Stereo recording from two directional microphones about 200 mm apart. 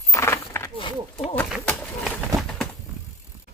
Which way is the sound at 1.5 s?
Centre (ahead or behind).